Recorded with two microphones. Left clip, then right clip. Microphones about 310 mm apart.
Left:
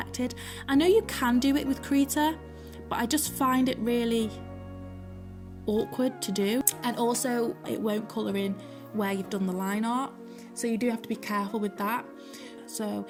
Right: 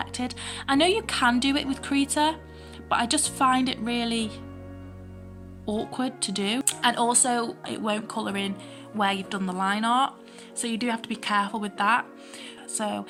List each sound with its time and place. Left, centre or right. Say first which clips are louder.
0.0 s speech: right 2 dB; left
5.8 s speech: even; left